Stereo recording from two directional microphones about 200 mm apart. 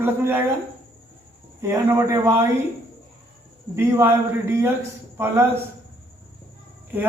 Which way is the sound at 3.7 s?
15° right (ahead or behind).